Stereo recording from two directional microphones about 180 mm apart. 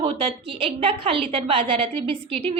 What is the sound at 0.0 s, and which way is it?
A woman's voice, 30° right (ahead or behind).